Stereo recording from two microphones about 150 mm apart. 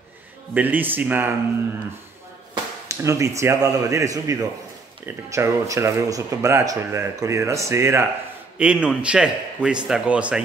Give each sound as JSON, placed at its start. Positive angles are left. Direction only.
{"t": 0.6, "sound": "a man's voice", "side_deg": -10}
{"t": 2.5, "sound": "a man's voice", "side_deg": -20}